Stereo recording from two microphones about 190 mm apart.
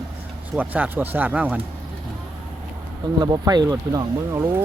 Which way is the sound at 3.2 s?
20° right (ahead or behind).